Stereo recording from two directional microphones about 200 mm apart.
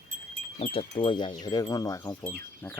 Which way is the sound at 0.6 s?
30° left (ahead or behind).